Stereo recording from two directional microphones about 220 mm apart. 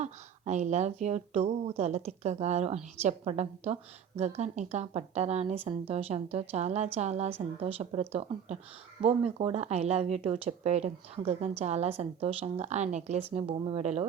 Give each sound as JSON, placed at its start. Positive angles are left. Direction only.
{"t": 0.0, "sound": "speech", "side_deg": -30}